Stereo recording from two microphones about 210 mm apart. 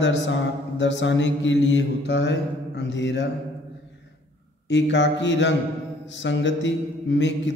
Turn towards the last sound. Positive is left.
turn(degrees=60)  # may be behind; listen again after turning